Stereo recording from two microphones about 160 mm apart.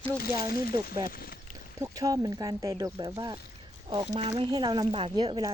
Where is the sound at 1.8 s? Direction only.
20° right (ahead or behind).